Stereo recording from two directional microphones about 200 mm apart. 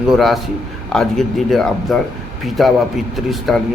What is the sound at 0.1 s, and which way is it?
A man's voice, centre (ahead or behind).